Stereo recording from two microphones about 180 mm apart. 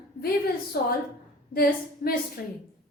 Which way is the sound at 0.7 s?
55° left (ahead or behind).